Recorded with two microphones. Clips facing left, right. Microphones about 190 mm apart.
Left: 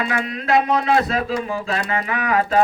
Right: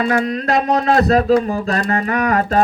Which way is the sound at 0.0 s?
45° right (ahead or behind).